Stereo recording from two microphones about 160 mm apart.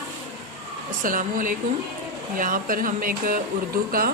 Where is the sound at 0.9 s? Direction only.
60° right (ahead or behind).